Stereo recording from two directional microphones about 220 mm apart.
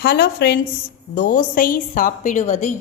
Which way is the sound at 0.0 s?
45° left (ahead or behind).